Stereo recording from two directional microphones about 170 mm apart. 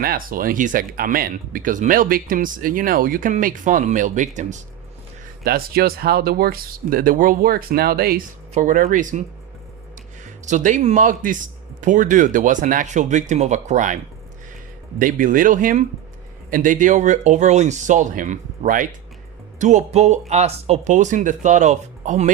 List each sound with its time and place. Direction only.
0.0 s speech: 60° right (ahead or behind)
5.4 s speech: 65° right (ahead or behind)
8.5 s speech: 50° right (ahead or behind)
10.4 s speech: 45° right (ahead or behind)